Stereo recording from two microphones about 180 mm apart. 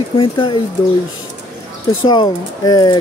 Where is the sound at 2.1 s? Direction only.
25° left (ahead or behind).